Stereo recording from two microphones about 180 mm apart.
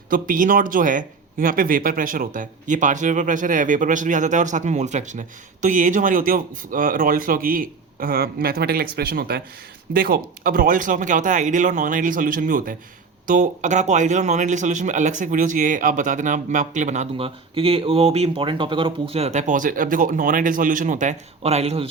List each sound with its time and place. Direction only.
0.1 s speech: 50° right (ahead or behind)